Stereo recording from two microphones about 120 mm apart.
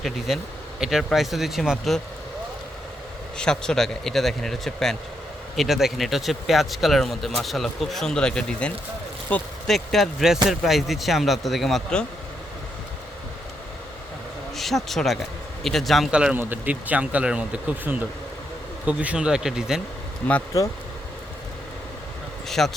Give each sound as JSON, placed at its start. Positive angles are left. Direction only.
{"t": 0.3, "sound": "speech", "side_deg": -5}
{"t": 3.3, "sound": "speech", "side_deg": 5}
{"t": 14.5, "sound": "a man's voice", "side_deg": 0}
{"t": 20.2, "sound": "speech", "side_deg": 10}
{"t": 22.4, "sound": "speech", "side_deg": 0}